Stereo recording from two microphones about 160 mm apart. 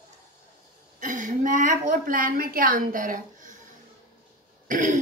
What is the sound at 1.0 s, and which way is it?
A woman's voice, 55° right (ahead or behind).